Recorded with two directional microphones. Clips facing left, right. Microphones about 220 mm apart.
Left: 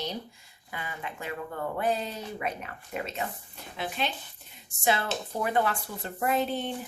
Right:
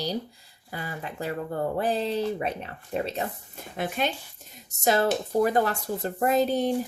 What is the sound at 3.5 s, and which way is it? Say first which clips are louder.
Speech: right 5 dB; 50° right (ahead or behind).